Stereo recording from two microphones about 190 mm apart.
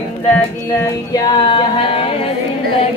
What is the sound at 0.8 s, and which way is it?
Music, 20° left (ahead or behind).